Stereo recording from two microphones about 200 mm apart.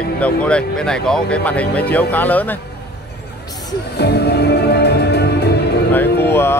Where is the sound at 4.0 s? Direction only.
55° left (ahead or behind).